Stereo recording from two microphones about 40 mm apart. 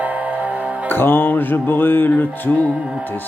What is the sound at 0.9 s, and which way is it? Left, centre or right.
Music, left.